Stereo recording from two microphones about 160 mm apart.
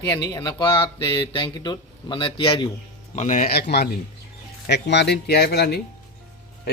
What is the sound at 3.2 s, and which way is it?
Speech, 50° left (ahead or behind).